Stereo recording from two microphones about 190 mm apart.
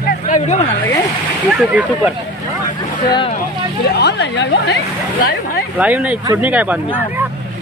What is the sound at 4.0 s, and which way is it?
Speech, 60° left (ahead or behind).